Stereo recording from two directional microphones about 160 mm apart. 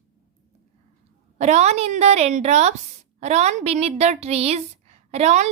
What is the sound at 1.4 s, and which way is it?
A woman's voice, 45° right (ahead or behind).